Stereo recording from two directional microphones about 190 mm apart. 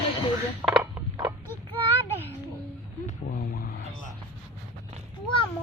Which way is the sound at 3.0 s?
50° left (ahead or behind).